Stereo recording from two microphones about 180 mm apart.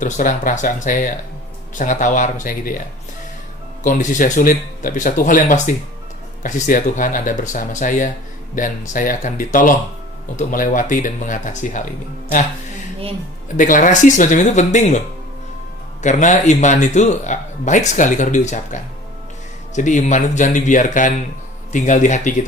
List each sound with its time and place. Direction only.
0.0 s speech: 45° left (ahead or behind)
3.8 s speech: 45° left (ahead or behind)
13.6 s speech: 45° left (ahead or behind)